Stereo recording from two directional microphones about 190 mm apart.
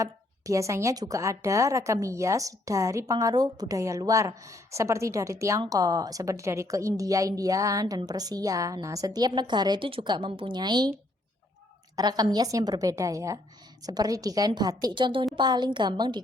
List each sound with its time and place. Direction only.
0.0 s a woman's voice: 15° right (ahead or behind)
11.9 s a woman's voice: 20° right (ahead or behind)